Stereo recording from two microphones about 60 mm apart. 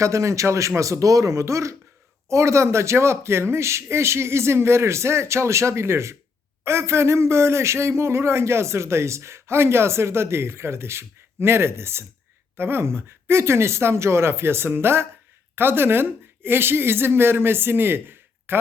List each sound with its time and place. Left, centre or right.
0.0 s speech: right